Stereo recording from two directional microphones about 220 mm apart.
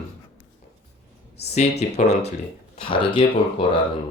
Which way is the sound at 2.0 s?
30° left (ahead or behind).